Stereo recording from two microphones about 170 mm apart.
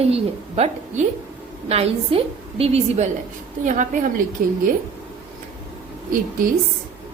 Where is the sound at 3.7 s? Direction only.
50° right (ahead or behind).